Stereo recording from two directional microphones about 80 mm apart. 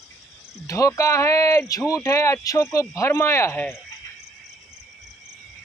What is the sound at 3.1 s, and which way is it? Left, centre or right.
Speech, left.